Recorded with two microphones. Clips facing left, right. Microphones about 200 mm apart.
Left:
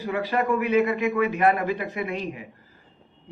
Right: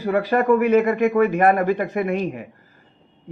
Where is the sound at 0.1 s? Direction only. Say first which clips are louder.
Right 7 dB; 55° right (ahead or behind).